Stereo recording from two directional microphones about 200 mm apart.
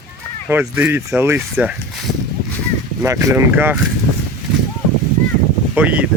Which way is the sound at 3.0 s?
15° right (ahead or behind).